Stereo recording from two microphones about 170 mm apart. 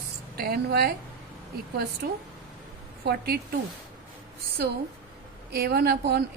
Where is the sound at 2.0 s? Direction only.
65° right (ahead or behind).